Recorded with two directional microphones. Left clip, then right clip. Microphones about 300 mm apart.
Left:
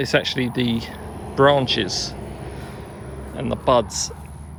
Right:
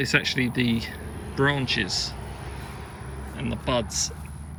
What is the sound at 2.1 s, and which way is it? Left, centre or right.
Vehicle, left.